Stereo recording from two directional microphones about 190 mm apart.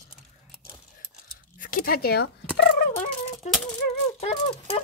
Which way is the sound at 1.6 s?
45° left (ahead or behind).